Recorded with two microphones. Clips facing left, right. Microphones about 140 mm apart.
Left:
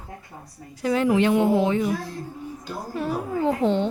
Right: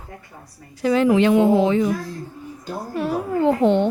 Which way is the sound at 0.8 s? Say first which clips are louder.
Right 4 dB; 90° right.